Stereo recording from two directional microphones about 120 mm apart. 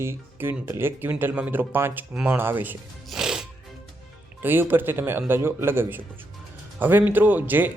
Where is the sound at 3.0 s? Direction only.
5° right (ahead or behind).